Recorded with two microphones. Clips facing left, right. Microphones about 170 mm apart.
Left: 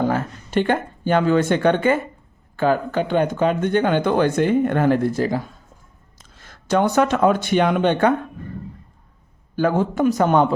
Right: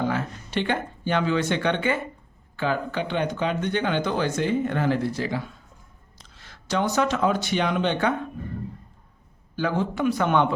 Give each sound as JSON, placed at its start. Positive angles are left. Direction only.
{"t": 0.0, "sound": "speech", "side_deg": 45}
{"t": 9.6, "sound": "speech", "side_deg": 50}